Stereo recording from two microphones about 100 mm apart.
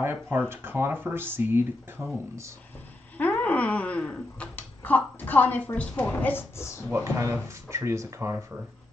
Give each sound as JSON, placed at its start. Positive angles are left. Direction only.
{"t": 0.0, "sound": "speech", "side_deg": -25}
{"t": 3.2, "sound": "speech", "side_deg": 15}
{"t": 7.2, "sound": "speech", "side_deg": -30}